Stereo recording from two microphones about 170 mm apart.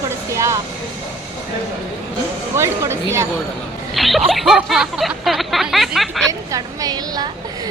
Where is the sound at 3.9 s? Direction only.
Centre (ahead or behind).